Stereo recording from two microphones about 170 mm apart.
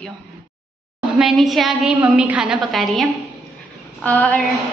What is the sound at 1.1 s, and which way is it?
A woman's voice, centre (ahead or behind).